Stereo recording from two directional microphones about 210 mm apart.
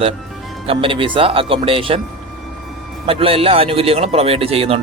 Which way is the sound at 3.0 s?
25° right (ahead or behind).